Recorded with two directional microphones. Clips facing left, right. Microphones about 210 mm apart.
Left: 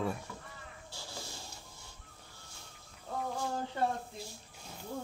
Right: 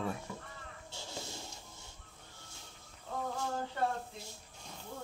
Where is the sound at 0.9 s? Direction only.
20° right (ahead or behind).